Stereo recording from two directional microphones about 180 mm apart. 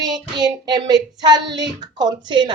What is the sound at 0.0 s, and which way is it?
Child singing, 20° right (ahead or behind).